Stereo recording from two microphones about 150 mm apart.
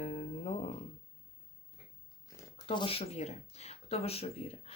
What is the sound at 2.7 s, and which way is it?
Speech, 35° left (ahead or behind).